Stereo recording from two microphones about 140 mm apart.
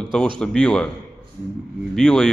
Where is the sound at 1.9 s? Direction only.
5° left (ahead or behind).